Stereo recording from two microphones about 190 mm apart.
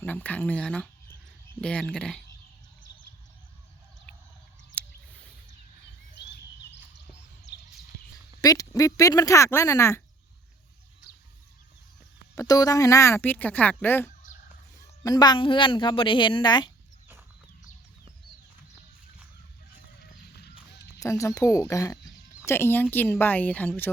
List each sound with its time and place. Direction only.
0.0 s speech: 10° left (ahead or behind)
8.4 s speech: 20° left (ahead or behind)
12.4 s a woman's voice: 20° left (ahead or behind)
21.0 s speech: 15° left (ahead or behind)